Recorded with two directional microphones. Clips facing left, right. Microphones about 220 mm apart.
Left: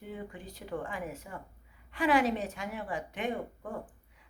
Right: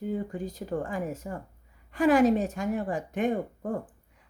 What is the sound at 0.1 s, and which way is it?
A woman's voice, 40° right (ahead or behind).